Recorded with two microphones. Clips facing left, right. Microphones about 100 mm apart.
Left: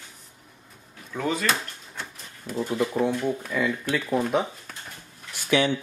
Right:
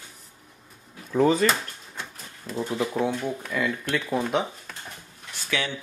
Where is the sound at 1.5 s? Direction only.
Centre (ahead or behind).